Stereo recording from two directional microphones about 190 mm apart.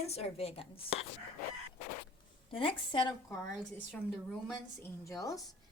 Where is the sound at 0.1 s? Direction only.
35° left (ahead or behind).